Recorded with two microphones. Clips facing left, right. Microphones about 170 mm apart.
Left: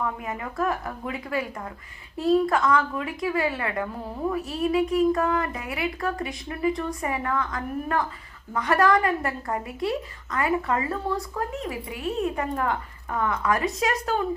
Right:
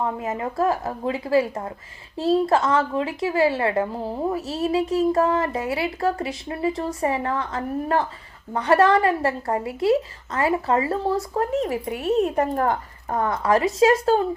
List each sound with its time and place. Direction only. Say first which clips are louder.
0.0 s a woman's voice: right 5 dB; 25° right (ahead or behind)